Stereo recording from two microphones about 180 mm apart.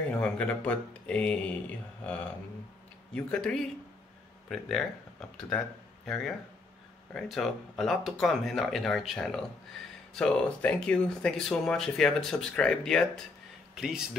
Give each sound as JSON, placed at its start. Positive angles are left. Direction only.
{"t": 0.2, "sound": "speech", "side_deg": 5}
{"t": 3.2, "sound": "speech", "side_deg": 5}